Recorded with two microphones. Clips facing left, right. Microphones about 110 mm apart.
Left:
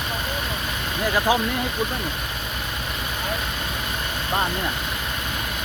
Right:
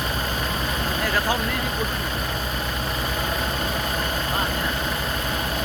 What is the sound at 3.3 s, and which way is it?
Vehicle, 35° right (ahead or behind).